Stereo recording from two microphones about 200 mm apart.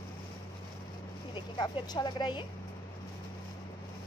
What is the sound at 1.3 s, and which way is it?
Speech, 20° left (ahead or behind).